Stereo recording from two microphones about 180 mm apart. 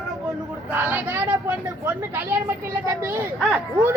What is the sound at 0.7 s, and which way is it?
Speech, 10° right (ahead or behind).